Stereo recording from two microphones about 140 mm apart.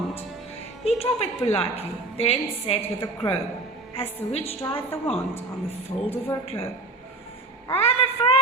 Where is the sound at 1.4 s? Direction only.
45° left (ahead or behind).